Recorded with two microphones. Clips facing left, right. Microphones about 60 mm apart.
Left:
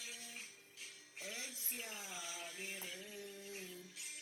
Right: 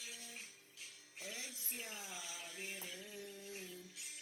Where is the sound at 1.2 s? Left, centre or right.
Left.